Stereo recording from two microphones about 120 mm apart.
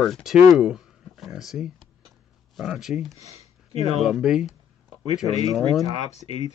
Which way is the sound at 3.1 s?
60° left (ahead or behind).